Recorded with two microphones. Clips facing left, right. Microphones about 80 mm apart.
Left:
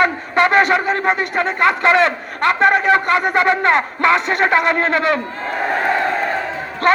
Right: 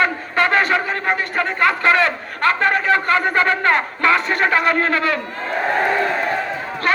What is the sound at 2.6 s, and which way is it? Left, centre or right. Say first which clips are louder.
A man's voice: left 7 dB; centre.